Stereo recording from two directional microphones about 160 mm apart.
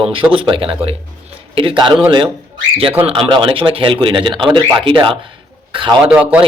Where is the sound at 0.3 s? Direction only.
35° right (ahead or behind).